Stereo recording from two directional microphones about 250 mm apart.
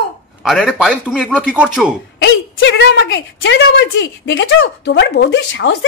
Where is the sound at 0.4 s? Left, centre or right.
Centre.